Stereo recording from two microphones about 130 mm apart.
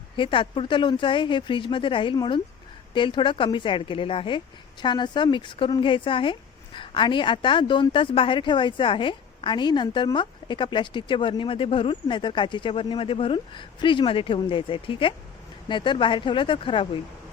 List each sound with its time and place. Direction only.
0.2 s a woman's voice: 40° left (ahead or behind)